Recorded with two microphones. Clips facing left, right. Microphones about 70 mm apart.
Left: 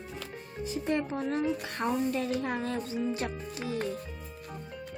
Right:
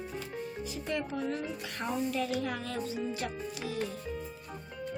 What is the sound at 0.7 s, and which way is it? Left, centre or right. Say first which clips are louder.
Speech: left 6 dB; left.